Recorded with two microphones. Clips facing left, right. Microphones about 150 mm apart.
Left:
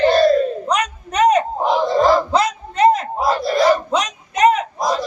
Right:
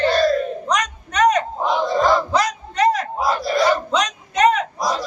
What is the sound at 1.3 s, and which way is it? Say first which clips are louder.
Battle cry: left 3 dB; 25° left (ahead or behind).